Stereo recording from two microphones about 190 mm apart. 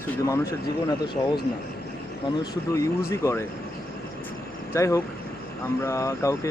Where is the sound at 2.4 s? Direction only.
15° left (ahead or behind).